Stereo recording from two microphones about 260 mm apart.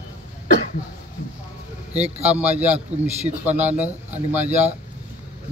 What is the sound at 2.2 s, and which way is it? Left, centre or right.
Speech, centre.